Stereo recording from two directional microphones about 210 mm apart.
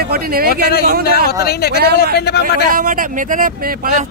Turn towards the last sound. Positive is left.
turn(degrees=-40)  # may be behind; listen again after turning